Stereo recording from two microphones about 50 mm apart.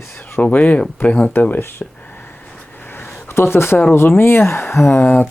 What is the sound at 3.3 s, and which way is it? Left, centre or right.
Speech, left.